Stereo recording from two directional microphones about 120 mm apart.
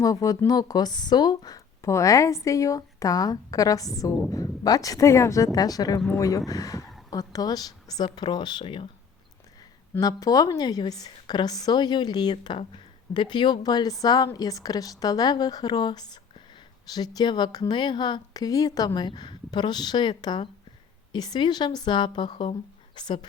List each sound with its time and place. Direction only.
0.0 s a woman's voice: 30° left (ahead or behind); by 8.9 s 45° left (ahead or behind)
10.0 s a woman's voice: 30° left (ahead or behind)